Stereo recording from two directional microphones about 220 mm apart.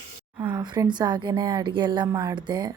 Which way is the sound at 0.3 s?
10° right (ahead or behind).